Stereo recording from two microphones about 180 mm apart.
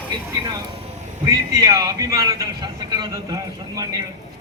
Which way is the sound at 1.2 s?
20° right (ahead or behind).